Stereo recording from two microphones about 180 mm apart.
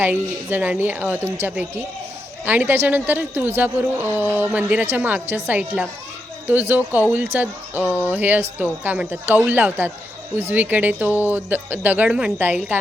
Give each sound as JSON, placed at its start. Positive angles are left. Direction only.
{"t": 0.0, "sound": "speech", "side_deg": -10}